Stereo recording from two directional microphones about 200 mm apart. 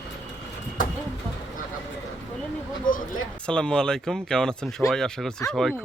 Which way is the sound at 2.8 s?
40° left (ahead or behind).